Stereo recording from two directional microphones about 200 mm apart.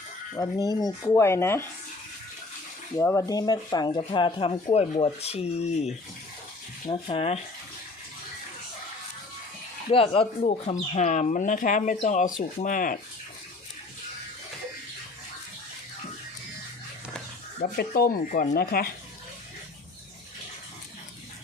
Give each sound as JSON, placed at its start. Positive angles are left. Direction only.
{"t": 0.3, "sound": "speech", "side_deg": 20}
{"t": 2.9, "sound": "speech", "side_deg": 15}
{"t": 9.9, "sound": "speech", "side_deg": 25}
{"t": 17.6, "sound": "speech", "side_deg": 50}